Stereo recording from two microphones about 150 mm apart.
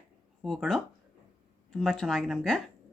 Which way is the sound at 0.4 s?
Centre (ahead or behind).